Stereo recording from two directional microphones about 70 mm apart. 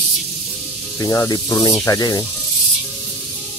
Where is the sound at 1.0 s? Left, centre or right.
Left.